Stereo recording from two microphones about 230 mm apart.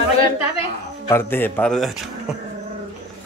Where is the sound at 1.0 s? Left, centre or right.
Centre.